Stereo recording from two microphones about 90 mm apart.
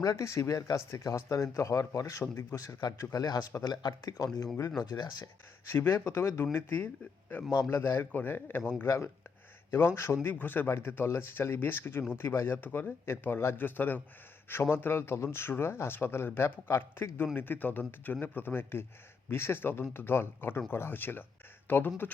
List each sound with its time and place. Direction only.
0.0 s speech: 35° left (ahead or behind); by 5.3 s 50° left (ahead or behind)
5.7 s speech: 30° left (ahead or behind)